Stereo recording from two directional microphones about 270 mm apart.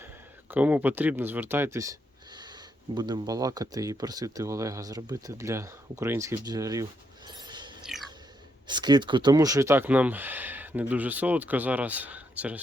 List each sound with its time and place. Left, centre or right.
0.5 s speech: centre
7.3 s a sound: centre
8.6 s speech: centre